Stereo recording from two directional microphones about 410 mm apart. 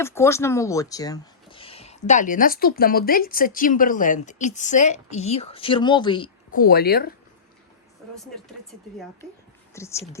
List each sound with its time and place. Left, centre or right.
0.0 s speech: centre; by 7.1 s left
9.7 s speech: centre